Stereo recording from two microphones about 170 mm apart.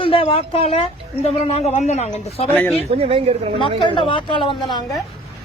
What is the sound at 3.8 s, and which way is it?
Speech, 30° left (ahead or behind).